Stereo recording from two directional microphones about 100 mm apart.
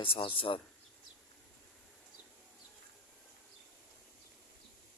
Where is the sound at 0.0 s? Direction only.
65° left (ahead or behind).